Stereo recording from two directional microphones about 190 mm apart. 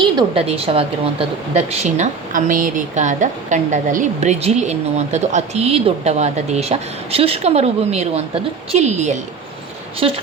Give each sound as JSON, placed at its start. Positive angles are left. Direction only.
{"t": 0.0, "sound": "a woman's voice", "side_deg": -25}